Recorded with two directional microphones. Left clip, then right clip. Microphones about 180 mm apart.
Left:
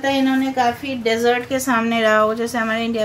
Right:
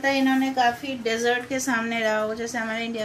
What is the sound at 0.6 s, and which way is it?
A woman's voice, 20° left (ahead or behind).